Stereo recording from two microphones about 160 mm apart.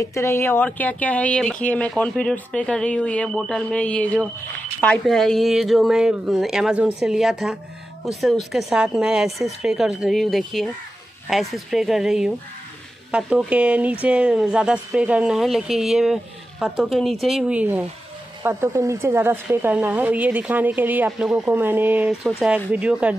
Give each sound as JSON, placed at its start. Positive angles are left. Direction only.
{"t": 0.0, "sound": "speech", "side_deg": 15}